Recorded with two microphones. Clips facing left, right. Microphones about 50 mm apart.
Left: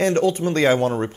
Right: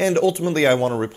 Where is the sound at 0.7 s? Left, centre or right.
Centre.